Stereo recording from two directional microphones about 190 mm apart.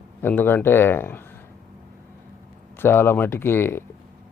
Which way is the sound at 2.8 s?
10° left (ahead or behind).